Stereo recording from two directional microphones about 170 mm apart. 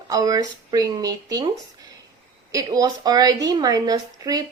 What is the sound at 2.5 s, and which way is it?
A woman's voice, 20° right (ahead or behind).